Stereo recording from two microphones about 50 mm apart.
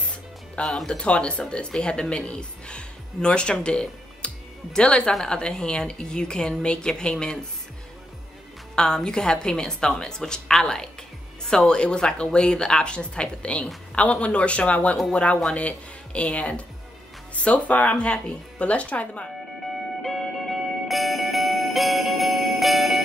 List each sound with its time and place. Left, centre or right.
0.0 s music: left
0.8 s a woman's voice: centre
8.7 s a woman's voice: centre
11.7 s a woman's voice: centre
19.6 s music: centre